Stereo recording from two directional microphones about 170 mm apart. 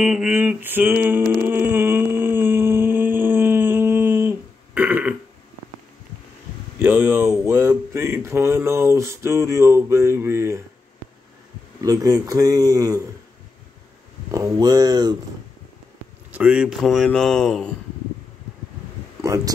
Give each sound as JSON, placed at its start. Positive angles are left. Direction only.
{"t": 0.0, "sound": "a sound", "side_deg": -5}
{"t": 6.8, "sound": "speech", "side_deg": -15}
{"t": 11.8, "sound": "speech", "side_deg": -20}
{"t": 14.3, "sound": "speech", "side_deg": -20}
{"t": 16.3, "sound": "speech", "side_deg": -10}
{"t": 19.2, "sound": "speech", "side_deg": -20}